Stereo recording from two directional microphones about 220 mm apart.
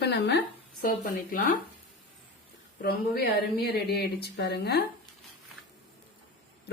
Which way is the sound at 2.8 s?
45° left (ahead or behind).